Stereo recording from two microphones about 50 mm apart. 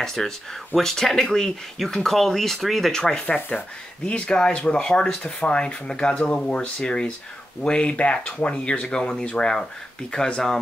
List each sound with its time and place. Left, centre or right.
0.0 s speech: centre
2.9 s speech: centre